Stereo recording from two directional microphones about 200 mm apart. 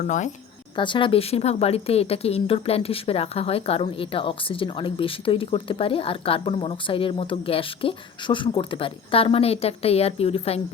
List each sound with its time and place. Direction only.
0.8 s a woman's voice: 25° left (ahead or behind)